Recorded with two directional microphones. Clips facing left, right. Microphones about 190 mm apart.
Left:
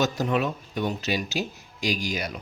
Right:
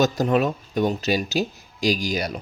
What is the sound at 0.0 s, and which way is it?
Speech, 40° right (ahead or behind).